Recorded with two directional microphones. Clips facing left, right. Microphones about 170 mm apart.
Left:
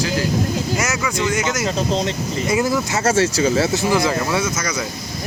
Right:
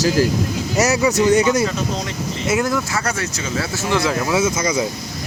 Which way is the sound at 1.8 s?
30° left (ahead or behind).